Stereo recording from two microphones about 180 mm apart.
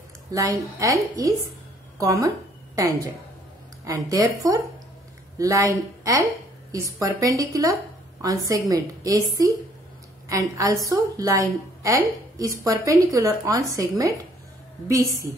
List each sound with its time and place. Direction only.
0.3 s a woman's voice: 20° right (ahead or behind)